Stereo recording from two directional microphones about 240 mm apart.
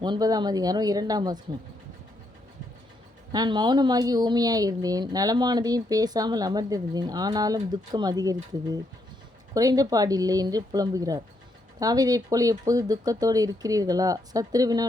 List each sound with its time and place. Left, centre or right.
0.0 s speech: centre
3.3 s speech: centre